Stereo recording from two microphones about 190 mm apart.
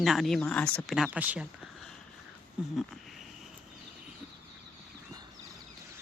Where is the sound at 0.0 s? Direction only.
Centre (ahead or behind).